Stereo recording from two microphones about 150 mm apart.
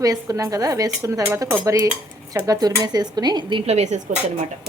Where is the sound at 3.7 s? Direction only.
50° right (ahead or behind).